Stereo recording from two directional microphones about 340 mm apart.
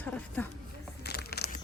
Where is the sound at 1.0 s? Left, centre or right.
Left.